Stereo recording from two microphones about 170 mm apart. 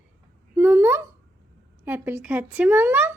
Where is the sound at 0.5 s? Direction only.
15° right (ahead or behind).